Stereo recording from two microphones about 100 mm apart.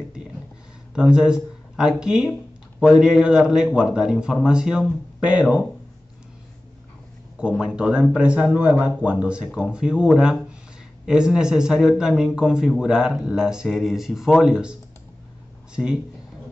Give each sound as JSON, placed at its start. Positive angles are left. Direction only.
{"t": 0.9, "sound": "a man's voice", "side_deg": -10}
{"t": 7.3, "sound": "a man's voice", "side_deg": -10}